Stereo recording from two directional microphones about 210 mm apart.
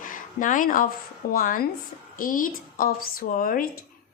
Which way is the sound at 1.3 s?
40° left (ahead or behind).